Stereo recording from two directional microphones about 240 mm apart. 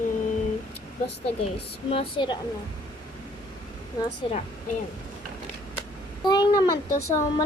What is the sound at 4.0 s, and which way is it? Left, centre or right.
Speech, centre.